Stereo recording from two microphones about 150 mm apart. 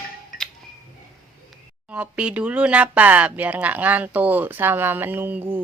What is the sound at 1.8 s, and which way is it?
Speech, 10° right (ahead or behind).